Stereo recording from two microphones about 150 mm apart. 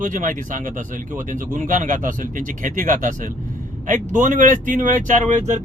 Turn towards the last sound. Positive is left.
turn(degrees=-55)  # may be behind; listen again after turning